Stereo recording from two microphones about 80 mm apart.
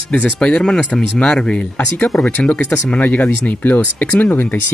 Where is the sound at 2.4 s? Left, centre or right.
Centre.